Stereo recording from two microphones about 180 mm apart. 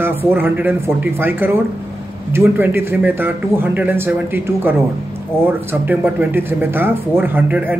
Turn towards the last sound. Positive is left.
turn(degrees=-10)  # may be behind; listen again after turning